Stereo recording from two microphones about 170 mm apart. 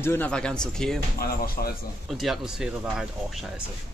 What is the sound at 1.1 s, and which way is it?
Speech, 60° left (ahead or behind).